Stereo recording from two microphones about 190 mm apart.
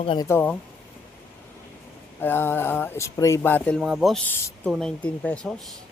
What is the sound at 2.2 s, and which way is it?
Speech, 10° left (ahead or behind).